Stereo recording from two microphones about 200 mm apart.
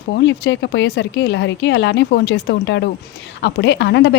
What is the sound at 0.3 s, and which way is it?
Speech, 60° left (ahead or behind).